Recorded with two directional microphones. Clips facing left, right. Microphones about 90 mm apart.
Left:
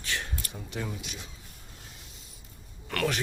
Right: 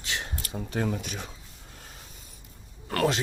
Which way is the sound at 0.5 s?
50° right (ahead or behind).